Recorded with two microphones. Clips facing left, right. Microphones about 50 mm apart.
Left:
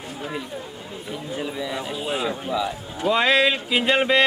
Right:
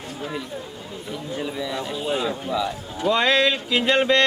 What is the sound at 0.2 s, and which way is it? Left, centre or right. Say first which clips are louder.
A man's voice: even; centre.